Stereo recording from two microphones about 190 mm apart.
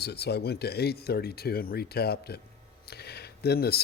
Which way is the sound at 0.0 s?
60° left (ahead or behind).